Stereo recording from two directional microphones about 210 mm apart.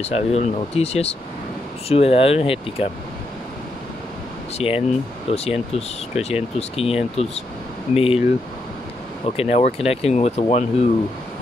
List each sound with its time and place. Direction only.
0.0 s speech: 30° left (ahead or behind)
4.6 s speech: 30° left (ahead or behind)
9.4 s speech: 30° left (ahead or behind)